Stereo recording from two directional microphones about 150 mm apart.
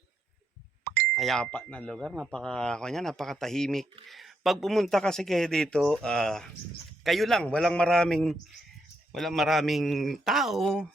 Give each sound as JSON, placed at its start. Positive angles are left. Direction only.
{"t": 0.9, "sound": "ding", "side_deg": -90}
{"t": 1.1, "sound": "speech", "side_deg": 0}